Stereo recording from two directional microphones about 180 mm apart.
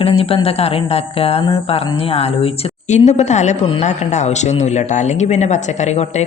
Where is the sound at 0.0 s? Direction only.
30° left (ahead or behind).